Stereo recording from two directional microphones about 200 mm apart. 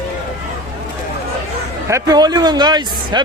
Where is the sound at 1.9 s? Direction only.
20° right (ahead or behind).